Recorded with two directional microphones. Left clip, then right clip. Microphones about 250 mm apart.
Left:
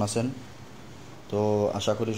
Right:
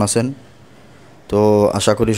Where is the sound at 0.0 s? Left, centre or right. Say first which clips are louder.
Right 10 dB; right.